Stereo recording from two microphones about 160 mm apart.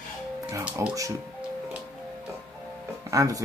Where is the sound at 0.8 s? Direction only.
20° right (ahead or behind).